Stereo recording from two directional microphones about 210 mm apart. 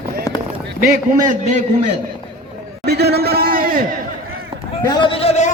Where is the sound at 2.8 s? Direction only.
50° right (ahead or behind).